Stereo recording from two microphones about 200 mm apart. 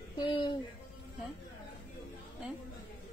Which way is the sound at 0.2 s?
25° left (ahead or behind).